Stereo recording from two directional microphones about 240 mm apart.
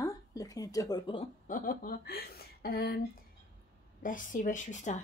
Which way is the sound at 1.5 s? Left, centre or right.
Left.